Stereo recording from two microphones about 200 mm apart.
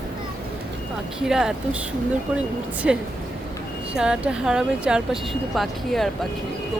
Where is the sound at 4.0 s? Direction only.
5° right (ahead or behind).